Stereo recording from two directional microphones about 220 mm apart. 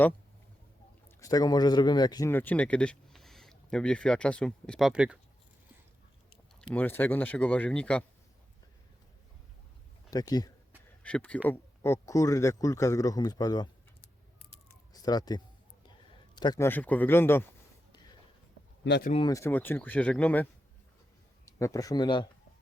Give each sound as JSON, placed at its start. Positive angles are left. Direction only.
{"t": 1.0, "sound": "speech", "side_deg": 15}
{"t": 6.6, "sound": "speech", "side_deg": 10}
{"t": 10.1, "sound": "speech", "side_deg": 15}
{"t": 11.0, "sound": "speech", "side_deg": 5}
{"t": 14.9, "sound": "speech", "side_deg": 15}
{"t": 18.9, "sound": "speech", "side_deg": 50}
{"t": 19.1, "sound": "speech", "side_deg": 15}